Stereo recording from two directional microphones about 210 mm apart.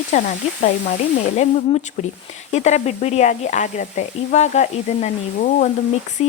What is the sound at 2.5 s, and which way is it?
A woman's voice, 30° left (ahead or behind).